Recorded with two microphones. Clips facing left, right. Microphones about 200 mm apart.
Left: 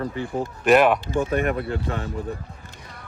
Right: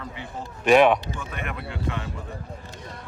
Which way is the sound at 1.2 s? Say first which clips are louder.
Left 12 dB; 45° left (ahead or behind).